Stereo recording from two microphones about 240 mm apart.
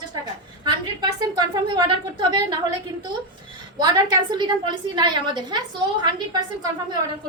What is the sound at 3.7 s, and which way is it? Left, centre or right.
A woman's voice, centre.